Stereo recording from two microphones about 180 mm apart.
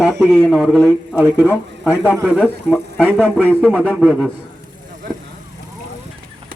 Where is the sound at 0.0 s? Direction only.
Centre (ahead or behind).